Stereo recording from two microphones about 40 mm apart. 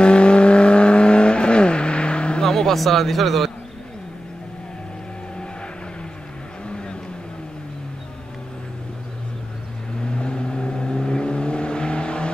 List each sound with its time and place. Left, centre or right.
0.0 s vehicle: left
2.4 s vehicle: centre
2.8 s speech: centre
6.7 s vehicle: left
10.0 s vehicle: left